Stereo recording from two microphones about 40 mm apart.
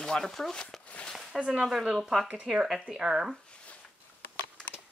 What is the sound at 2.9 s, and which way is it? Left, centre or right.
Speech, centre.